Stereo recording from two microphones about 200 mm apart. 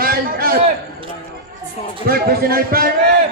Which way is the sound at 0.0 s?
50° right (ahead or behind).